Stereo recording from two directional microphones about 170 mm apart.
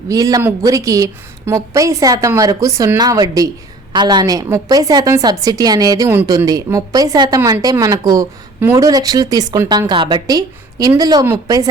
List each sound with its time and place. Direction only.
0.1 s a woman's voice: 20° right (ahead or behind)